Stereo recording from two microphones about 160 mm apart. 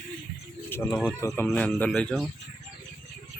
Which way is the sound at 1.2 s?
20° left (ahead or behind).